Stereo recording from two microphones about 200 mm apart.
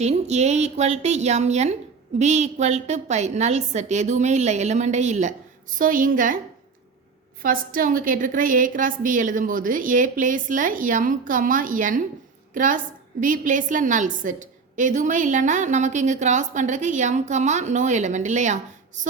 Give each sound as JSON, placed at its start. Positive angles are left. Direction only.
{"t": 0.0, "sound": "a woman's voice", "side_deg": -35}
{"t": 7.4, "sound": "a woman's voice", "side_deg": -45}